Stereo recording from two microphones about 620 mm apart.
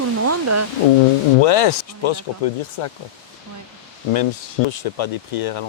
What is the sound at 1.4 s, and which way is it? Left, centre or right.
Speech, left.